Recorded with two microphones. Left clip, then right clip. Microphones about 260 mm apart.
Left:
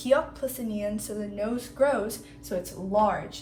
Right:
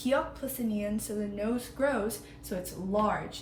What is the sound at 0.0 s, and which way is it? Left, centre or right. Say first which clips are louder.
A woman's voice: left 5 dB; left.